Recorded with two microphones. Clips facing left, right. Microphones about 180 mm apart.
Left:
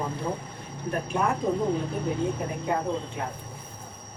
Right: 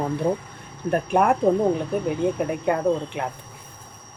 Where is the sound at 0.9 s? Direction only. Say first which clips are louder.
Right 7 dB; 65° right (ahead or behind).